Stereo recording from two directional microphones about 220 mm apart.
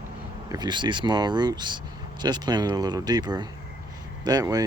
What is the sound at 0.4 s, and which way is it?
Speech, 15° right (ahead or behind).